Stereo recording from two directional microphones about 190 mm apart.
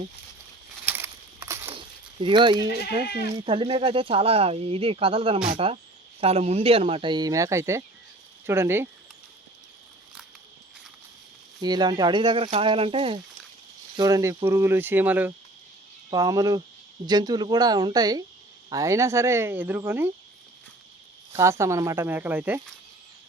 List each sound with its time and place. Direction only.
0.9 s a sound: 10° right (ahead or behind)
2.2 s speech: 25° right (ahead or behind)
11.6 s speech: 20° right (ahead or behind)
13.9 s speech: 20° right (ahead or behind)
16.0 s speech: 20° right (ahead or behind)
21.3 s speech: 15° right (ahead or behind)